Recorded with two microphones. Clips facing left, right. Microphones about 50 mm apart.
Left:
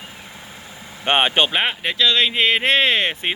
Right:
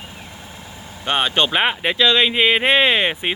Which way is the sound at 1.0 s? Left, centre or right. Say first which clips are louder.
Left 2 dB; left.